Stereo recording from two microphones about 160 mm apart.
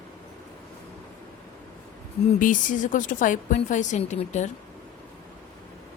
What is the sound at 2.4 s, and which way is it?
A woman's voice, 55° left (ahead or behind).